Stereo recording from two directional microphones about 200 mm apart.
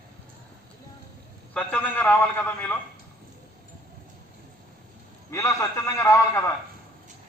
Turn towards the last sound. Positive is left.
turn(degrees=15)  # may be behind; listen again after turning